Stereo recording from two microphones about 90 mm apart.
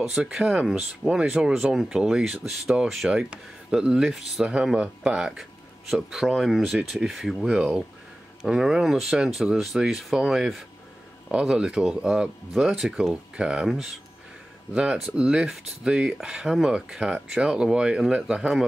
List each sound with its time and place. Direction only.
0.0 s speech: 5° right (ahead or behind)